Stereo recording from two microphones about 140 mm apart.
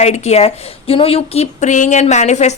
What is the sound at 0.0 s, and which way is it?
A woman's voice, 55° left (ahead or behind).